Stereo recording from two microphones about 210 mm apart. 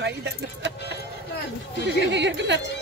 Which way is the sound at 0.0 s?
55° right (ahead or behind).